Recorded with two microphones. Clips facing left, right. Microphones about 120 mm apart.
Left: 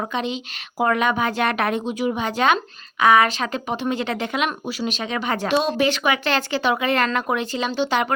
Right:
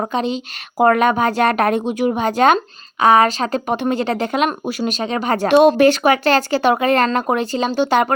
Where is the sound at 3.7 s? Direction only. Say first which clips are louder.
Right 5 dB; 55° right (ahead or behind).